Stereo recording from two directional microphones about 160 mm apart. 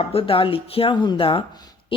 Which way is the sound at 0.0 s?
35° left (ahead or behind).